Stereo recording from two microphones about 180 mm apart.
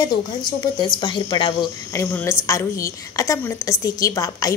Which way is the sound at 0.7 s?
25° left (ahead or behind).